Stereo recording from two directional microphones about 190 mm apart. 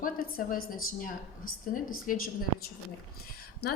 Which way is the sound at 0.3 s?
50° left (ahead or behind).